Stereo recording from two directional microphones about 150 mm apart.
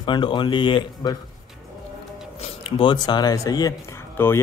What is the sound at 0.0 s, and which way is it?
Speech, 30° left (ahead or behind).